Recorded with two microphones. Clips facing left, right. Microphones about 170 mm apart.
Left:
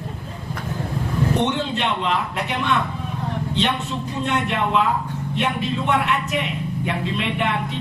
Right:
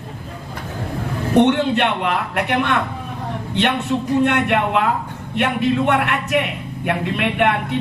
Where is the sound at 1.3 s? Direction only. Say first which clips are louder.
Right 12 dB; 60° right (ahead or behind).